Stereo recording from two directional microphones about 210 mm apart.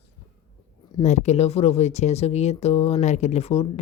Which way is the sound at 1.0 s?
35° left (ahead or behind).